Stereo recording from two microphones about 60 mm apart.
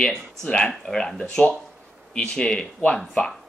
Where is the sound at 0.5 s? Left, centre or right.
Centre.